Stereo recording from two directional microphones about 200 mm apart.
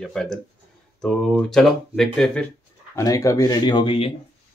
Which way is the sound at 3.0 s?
15° left (ahead or behind).